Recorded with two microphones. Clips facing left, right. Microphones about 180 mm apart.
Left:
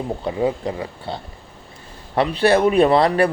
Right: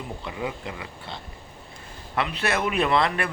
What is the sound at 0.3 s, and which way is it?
Speech, 35° left (ahead or behind).